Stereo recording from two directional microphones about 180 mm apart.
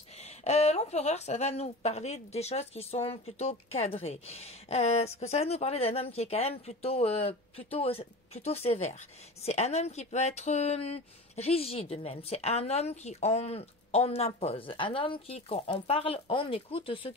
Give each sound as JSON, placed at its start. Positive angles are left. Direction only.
{"t": 0.2, "sound": "speech", "side_deg": 35}